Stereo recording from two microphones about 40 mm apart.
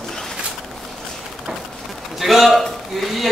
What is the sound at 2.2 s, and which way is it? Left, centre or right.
Speech, centre.